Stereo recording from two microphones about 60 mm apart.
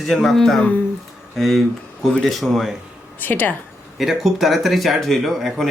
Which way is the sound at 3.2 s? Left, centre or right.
Left.